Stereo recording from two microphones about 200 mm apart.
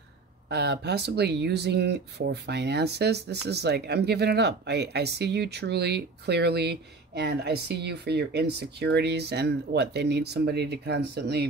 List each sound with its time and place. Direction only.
0.5 s speech: 55° right (ahead or behind)